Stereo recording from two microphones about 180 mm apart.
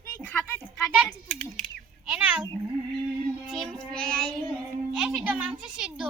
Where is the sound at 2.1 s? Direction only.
10° right (ahead or behind).